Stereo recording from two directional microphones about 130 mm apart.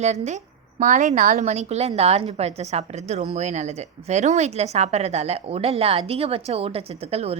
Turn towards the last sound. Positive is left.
turn(degrees=-50)  # may be behind; listen again after turning